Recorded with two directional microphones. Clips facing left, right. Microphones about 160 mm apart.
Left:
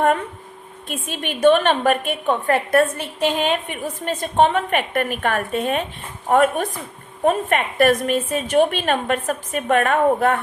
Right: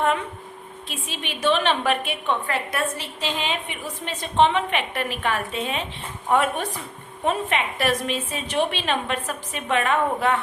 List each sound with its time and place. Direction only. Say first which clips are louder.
0.9 s a woman's voice: left 6 dB; 50° left (ahead or behind)